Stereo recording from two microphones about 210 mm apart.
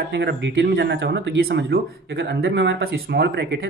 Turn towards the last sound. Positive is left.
turn(degrees=-50)  # may be behind; listen again after turning